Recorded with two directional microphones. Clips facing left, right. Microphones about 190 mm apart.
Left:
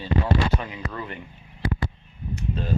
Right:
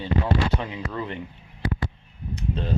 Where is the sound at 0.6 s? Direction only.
20° right (ahead or behind).